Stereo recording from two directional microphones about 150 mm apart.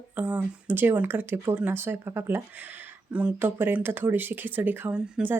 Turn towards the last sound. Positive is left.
turn(degrees=-10)  # may be behind; listen again after turning